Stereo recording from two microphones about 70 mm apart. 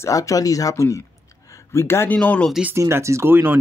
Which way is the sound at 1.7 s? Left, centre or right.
Left.